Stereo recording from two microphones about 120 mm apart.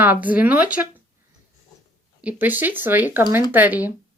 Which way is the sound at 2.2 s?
15° right (ahead or behind).